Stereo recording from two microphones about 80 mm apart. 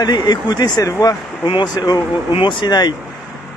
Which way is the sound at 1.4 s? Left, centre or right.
Left.